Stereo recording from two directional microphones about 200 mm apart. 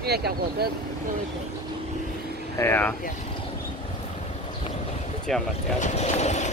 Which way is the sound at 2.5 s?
10° left (ahead or behind).